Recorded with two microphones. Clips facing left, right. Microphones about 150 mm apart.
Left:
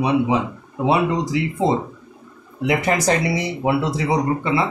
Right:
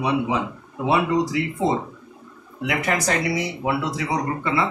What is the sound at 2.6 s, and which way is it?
Speech, 25° left (ahead or behind).